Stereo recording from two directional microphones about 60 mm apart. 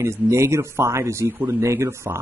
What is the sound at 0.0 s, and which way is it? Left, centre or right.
A man's voice, right.